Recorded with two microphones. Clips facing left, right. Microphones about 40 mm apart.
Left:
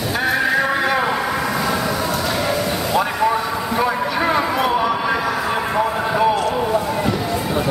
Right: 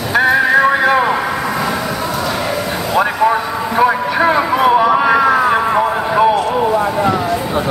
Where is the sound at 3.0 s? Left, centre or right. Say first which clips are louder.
Right 5 dB; centre.